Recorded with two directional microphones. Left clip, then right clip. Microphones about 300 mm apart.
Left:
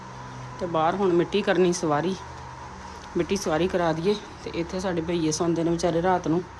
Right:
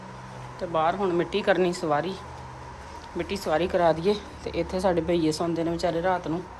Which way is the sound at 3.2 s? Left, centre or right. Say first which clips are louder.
Left 1 dB; centre.